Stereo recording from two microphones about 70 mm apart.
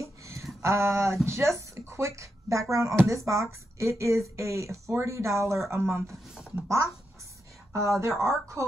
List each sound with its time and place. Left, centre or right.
0.0 s a sound: right
1.9 s speech: right
7.7 s speech: right